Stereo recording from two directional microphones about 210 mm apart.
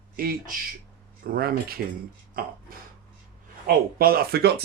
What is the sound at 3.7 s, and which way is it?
Speech, 45° right (ahead or behind).